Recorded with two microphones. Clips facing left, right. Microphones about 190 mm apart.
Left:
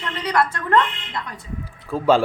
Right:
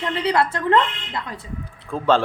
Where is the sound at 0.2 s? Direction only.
30° right (ahead or behind).